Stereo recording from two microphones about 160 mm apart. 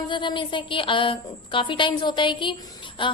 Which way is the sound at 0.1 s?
30° left (ahead or behind).